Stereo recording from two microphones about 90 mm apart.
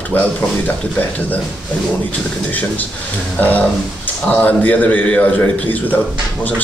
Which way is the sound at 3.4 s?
20° left (ahead or behind).